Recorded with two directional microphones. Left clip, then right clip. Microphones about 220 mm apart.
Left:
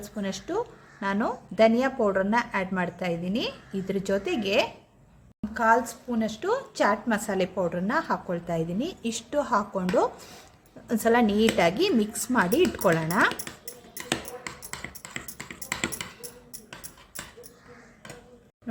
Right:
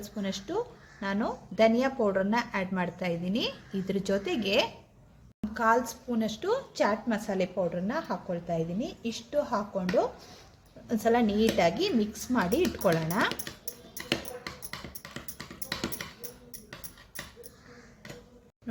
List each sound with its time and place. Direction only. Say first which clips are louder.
0.4 s a woman's voice: left 4 dB; 10° left (ahead or behind)